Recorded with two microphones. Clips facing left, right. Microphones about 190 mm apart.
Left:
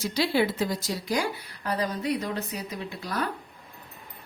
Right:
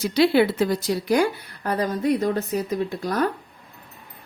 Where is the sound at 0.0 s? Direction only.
65° right (ahead or behind); by 3.2 s 45° right (ahead or behind).